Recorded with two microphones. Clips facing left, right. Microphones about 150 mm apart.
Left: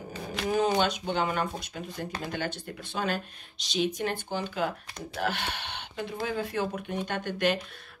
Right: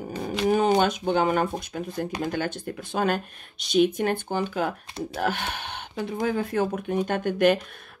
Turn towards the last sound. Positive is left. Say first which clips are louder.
# right 7 dB
turn(degrees=-50)  # may be behind; listen again after turning